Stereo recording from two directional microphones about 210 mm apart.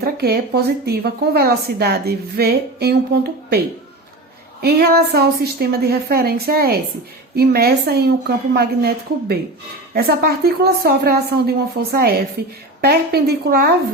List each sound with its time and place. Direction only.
0.0 s a woman's voice: 50° right (ahead or behind)
4.6 s a woman's voice: 50° right (ahead or behind)